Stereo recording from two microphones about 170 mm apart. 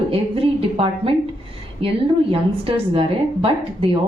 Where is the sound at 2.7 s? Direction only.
35° right (ahead or behind).